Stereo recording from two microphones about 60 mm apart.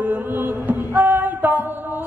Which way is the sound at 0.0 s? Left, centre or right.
Right.